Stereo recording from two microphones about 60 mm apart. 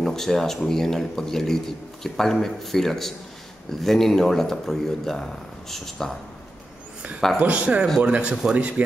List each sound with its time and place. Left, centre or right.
0.0 s speech: centre
7.3 s a man's voice: right